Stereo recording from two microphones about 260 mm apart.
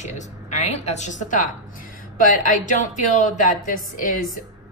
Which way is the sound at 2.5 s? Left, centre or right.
Left.